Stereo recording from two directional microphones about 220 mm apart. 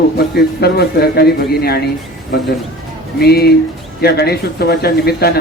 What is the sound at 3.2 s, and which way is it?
A man's voice, 45° left (ahead or behind).